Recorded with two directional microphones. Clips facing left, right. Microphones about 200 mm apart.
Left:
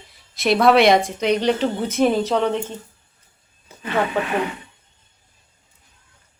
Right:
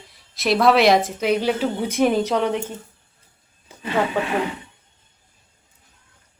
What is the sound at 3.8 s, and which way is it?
Speech, 25° right (ahead or behind).